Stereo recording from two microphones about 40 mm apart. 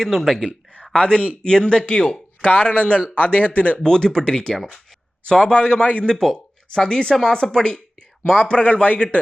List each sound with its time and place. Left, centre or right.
0.1 s speech: centre
1.1 s a man's voice: right
1.4 s speech: left
2.4 s speech: left
3.8 s speech: centre
6.1 s speech: centre
6.7 s speech: centre; by 9.0 s left